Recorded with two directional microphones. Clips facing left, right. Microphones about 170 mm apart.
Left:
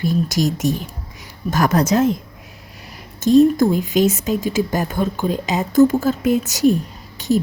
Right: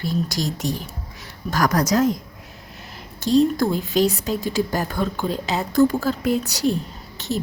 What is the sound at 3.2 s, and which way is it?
Speech, 50° left (ahead or behind).